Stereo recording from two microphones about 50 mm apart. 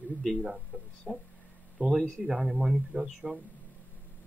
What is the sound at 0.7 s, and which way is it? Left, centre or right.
Speech, left.